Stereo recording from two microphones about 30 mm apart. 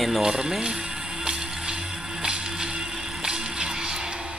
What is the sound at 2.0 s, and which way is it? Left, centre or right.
Whip, right.